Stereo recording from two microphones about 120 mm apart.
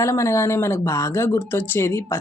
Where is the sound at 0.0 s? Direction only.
25° left (ahead or behind).